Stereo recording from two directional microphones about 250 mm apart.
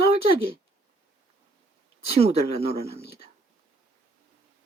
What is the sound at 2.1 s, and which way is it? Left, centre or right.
Speech, right.